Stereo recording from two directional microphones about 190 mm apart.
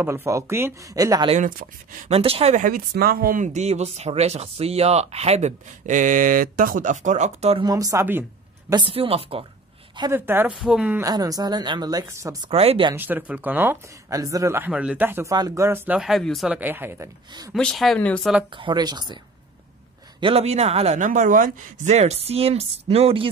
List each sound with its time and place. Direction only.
0.0 s speech: 10° right (ahead or behind)
1.3 s speech: 45° right (ahead or behind)
7.6 s a woman's voice: 20° right (ahead or behind)
8.7 s a woman's voice: 30° right (ahead or behind)
9.9 s speech: 15° right (ahead or behind)
12.4 s a woman's voice: 30° right (ahead or behind)
12.9 s speech: 10° right (ahead or behind)
17.6 s speech: 5° left (ahead or behind)
18.5 s a woman's voice: 25° right (ahead or behind)
20.2 s speech: 30° right (ahead or behind)